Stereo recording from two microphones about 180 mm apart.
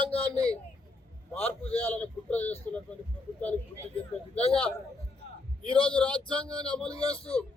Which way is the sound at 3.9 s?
35° left (ahead or behind).